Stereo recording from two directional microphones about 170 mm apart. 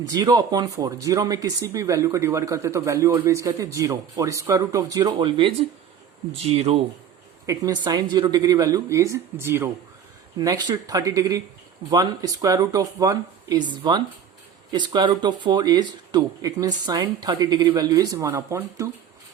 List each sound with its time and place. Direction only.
0.0 s a man's voice: 20° right (ahead or behind)
7.4 s speech: 20° right (ahead or behind)